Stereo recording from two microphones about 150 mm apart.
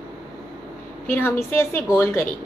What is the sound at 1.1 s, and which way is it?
A woman's voice, 15° left (ahead or behind).